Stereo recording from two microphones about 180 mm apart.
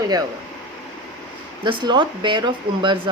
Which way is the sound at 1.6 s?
25° right (ahead or behind).